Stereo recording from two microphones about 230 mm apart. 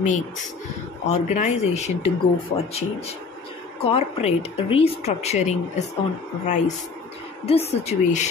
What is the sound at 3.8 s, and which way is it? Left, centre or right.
Speech, left.